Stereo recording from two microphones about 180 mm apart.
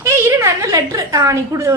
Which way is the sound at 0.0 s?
15° right (ahead or behind).